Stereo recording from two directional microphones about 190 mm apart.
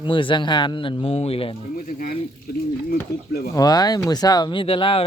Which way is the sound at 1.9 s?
45° left (ahead or behind).